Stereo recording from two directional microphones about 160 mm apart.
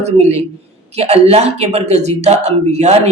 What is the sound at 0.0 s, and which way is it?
Speech, 40° right (ahead or behind).